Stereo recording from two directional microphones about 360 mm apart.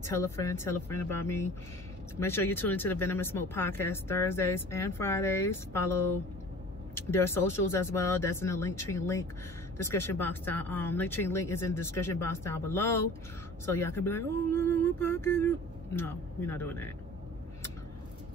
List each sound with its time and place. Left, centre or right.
0.0 s a man's voice: centre